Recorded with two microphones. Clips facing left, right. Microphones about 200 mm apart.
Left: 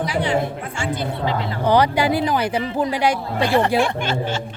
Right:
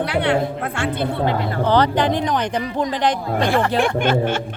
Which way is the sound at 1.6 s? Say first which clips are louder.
Left 1 dB; 10° left (ahead or behind).